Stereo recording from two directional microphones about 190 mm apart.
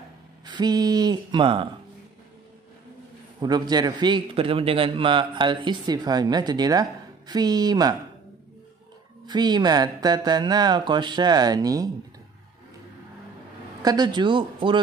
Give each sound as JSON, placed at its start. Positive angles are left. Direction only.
{"t": 0.5, "sound": "a man's voice", "side_deg": -20}
{"t": 3.3, "sound": "a man's voice", "side_deg": -20}
{"t": 9.2, "sound": "a man's voice", "side_deg": -20}
{"t": 13.8, "sound": "a man's voice", "side_deg": -20}